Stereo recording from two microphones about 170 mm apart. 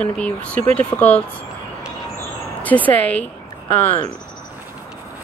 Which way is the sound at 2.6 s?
10° left (ahead or behind).